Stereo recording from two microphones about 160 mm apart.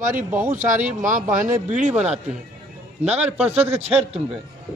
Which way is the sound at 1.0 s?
55° right (ahead or behind).